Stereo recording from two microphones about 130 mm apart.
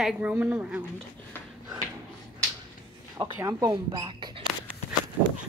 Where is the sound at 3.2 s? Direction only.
25° right (ahead or behind).